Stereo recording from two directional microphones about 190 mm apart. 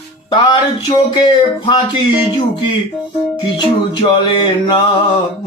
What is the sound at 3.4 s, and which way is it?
Music, 25° left (ahead or behind).